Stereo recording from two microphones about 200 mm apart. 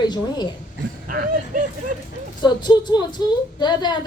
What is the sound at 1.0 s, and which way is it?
Speech, 45° right (ahead or behind).